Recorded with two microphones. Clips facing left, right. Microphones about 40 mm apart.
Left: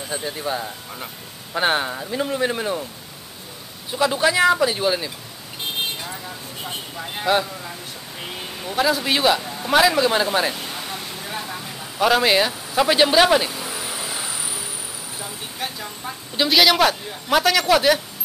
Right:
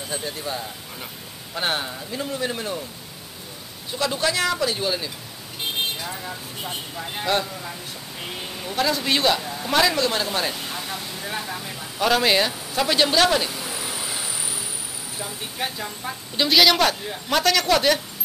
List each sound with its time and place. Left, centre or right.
0.1 s speech: centre
3.9 s speech: centre
6.0 s a woman's voice: centre
15.1 s a woman's voice: centre